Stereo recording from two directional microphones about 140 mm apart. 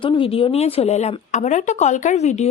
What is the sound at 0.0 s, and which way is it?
A woman's voice, 40° left (ahead or behind).